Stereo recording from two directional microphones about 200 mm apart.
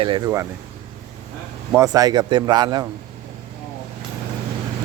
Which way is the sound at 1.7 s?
15° right (ahead or behind).